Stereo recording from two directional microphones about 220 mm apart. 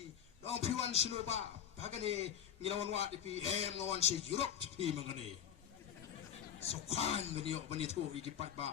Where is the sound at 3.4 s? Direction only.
30° right (ahead or behind).